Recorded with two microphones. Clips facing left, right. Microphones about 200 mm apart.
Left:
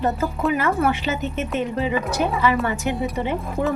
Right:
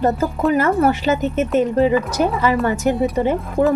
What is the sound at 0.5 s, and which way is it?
A woman's voice, 40° right (ahead or behind).